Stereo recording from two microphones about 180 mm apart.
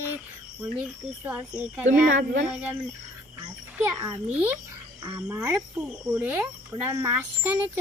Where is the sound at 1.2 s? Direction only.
10° right (ahead or behind).